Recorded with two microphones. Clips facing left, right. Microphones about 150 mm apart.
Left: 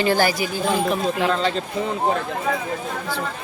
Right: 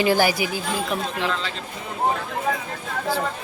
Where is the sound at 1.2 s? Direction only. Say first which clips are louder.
Left 6 dB; 40° left (ahead or behind).